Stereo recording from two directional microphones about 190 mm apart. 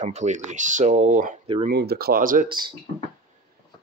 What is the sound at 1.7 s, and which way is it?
Speech, 55° right (ahead or behind).